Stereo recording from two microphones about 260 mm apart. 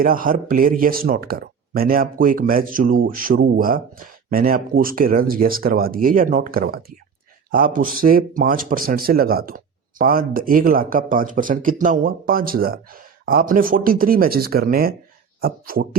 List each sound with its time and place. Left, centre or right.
0.0 s speech: right